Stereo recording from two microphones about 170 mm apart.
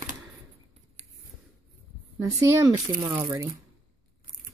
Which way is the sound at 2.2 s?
20° right (ahead or behind).